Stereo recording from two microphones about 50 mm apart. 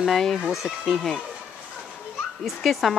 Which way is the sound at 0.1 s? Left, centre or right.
Centre.